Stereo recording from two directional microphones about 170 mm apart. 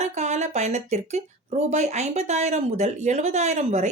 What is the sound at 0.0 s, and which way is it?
Speech, 40° right (ahead or behind).